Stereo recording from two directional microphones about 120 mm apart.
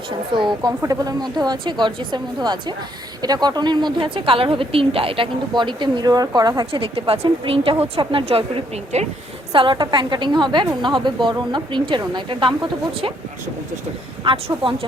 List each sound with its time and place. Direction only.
0.3 s a woman's voice: 40° right (ahead or behind)
0.8 s a woman's voice: 30° right (ahead or behind)
6.7 s speech: 50° right (ahead or behind)
8.9 s a woman's voice: 70° right (ahead or behind)
9.5 s a woman's voice: 45° right (ahead or behind)
14.3 s speech: 45° right (ahead or behind)